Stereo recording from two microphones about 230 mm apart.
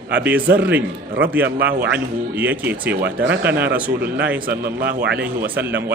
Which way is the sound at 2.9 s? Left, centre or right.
Right.